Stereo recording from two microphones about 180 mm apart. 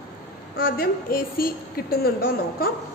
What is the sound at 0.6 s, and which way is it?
A woman's voice, 55° left (ahead or behind).